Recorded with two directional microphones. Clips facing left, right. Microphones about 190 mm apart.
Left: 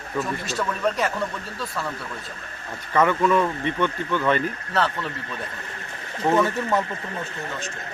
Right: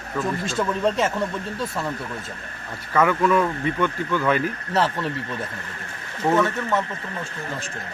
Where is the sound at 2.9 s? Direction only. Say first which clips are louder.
Even; 5° right (ahead or behind).